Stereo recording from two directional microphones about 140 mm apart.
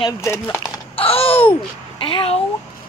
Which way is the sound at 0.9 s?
45° left (ahead or behind).